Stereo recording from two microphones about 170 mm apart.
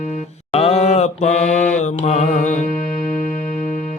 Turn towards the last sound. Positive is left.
turn(degrees=55)  # may be behind; listen again after turning